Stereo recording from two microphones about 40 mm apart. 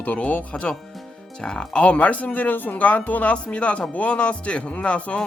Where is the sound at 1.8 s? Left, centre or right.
Left.